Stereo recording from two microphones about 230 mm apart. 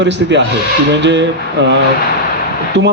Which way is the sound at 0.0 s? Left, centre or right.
Right.